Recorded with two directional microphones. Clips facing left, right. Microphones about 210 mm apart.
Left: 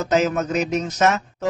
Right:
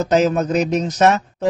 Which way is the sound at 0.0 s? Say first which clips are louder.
Right 4 dB; 35° right (ahead or behind).